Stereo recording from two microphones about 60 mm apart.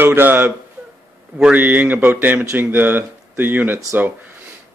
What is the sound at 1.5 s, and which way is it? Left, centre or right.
Speech, right.